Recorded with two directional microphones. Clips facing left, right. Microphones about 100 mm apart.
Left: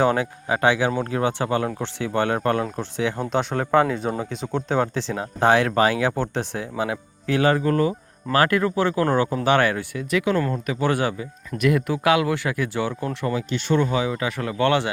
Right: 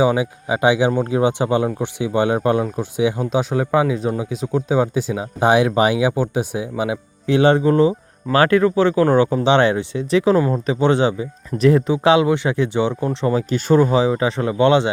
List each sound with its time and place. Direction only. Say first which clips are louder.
0.0 s speech: right 3 dB; 10° right (ahead or behind)
13.2 s speech: right 6 dB; 40° right (ahead or behind); by 14.8 s 20° right (ahead or behind)